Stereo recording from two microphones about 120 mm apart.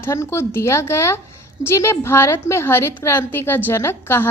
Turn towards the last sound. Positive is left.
turn(degrees=20)  # may be behind; listen again after turning